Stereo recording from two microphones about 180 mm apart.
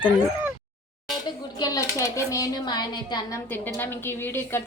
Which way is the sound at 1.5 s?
20° left (ahead or behind).